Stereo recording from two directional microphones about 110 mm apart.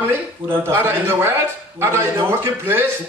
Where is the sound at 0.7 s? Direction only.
20° right (ahead or behind).